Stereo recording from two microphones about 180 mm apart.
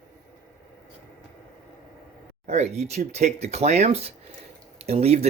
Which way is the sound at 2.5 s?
40° right (ahead or behind).